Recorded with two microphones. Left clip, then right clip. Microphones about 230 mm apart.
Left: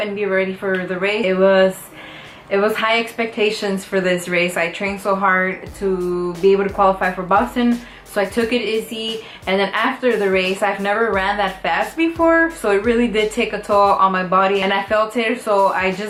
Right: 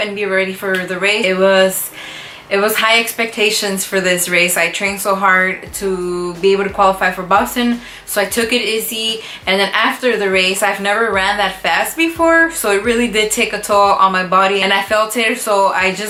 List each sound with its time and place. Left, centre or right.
0.0 s a woman's voice: centre
5.9 s a sound: left
6.5 s a woman's voice: centre